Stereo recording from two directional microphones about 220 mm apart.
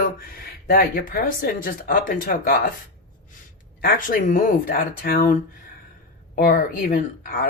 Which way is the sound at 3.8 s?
40° left (ahead or behind).